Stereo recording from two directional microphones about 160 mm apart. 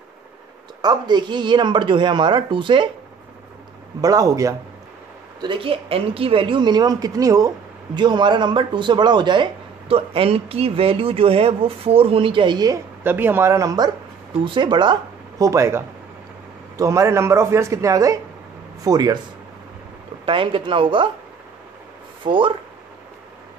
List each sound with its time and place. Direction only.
0.8 s speech: 30° right (ahead or behind)
4.0 s speech: 20° right (ahead or behind)
5.4 s speech: 35° right (ahead or behind)
13.0 s speech: 10° right (ahead or behind)
20.2 s speech: 35° right (ahead or behind)
22.2 s speech: 30° right (ahead or behind)